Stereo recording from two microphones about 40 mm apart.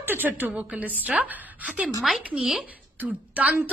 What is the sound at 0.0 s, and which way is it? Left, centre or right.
Speech, right.